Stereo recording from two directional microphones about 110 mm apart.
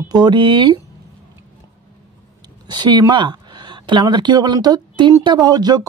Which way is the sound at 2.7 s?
40° right (ahead or behind).